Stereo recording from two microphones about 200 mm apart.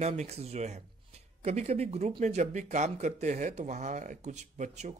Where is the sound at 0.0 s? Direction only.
35° right (ahead or behind).